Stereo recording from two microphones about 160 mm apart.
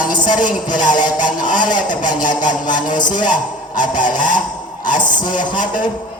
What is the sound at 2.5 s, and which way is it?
Speech, 25° left (ahead or behind).